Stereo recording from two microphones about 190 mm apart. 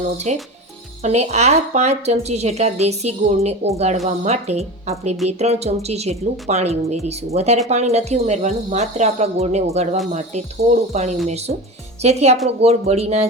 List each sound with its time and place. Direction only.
0.3 s a woman's voice: 35° right (ahead or behind)